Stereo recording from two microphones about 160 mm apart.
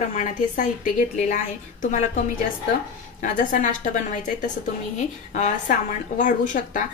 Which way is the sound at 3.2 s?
55° left (ahead or behind).